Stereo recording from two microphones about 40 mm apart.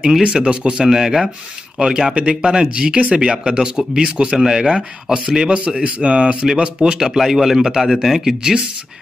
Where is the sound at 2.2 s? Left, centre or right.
Right.